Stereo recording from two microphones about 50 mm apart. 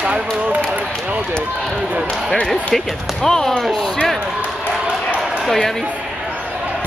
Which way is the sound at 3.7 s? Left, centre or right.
Centre.